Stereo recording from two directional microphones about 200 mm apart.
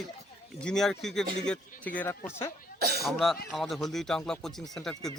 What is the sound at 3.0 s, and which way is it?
Speech, centre (ahead or behind).